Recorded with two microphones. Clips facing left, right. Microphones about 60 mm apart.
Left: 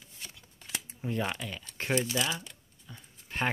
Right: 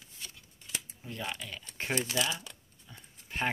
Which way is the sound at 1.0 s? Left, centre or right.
Left.